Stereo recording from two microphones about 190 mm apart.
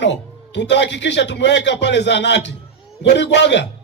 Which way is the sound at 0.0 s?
65° left (ahead or behind).